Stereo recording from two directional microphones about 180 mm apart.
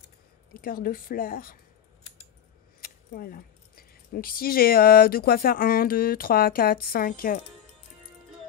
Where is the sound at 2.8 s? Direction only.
55° left (ahead or behind).